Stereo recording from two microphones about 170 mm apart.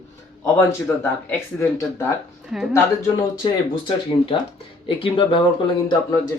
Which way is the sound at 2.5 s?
Centre (ahead or behind).